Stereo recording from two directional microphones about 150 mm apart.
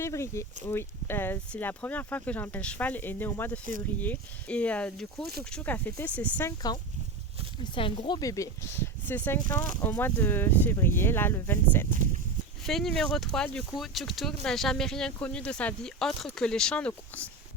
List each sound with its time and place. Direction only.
0.0 s speech: 20° left (ahead or behind)
7.6 s speech: 35° left (ahead or behind); by 11.9 s 15° left (ahead or behind)
12.6 s speech: centre (ahead or behind)